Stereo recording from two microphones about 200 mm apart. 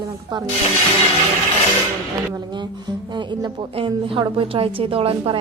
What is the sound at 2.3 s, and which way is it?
Speech, 20° right (ahead or behind).